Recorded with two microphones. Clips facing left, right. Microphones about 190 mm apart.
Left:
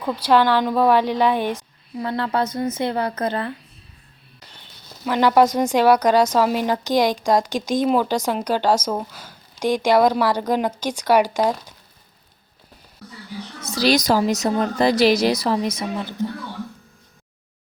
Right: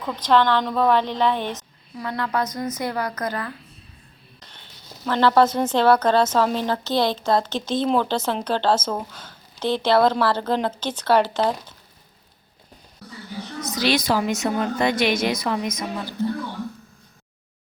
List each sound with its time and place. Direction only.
0.0 s a woman's voice: 10° left (ahead or behind)
2.0 s a woman's voice: 30° left (ahead or behind)
5.0 s a woman's voice: 10° left (ahead or behind)
13.6 s a woman's voice: 30° left (ahead or behind)
16.2 s a woman's voice: 15° left (ahead or behind)